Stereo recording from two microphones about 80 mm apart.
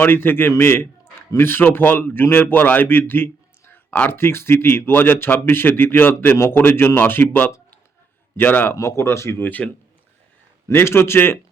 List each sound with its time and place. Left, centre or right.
0.0 s a man's voice: left
3.7 s a sound: centre
4.1 s a man's voice: left
8.7 s speech: left
10.7 s a man's voice: left